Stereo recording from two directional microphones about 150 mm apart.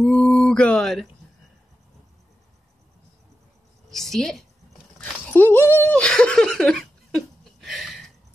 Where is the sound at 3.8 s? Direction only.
Centre (ahead or behind).